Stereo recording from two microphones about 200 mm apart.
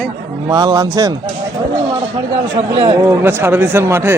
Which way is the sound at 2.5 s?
30° right (ahead or behind).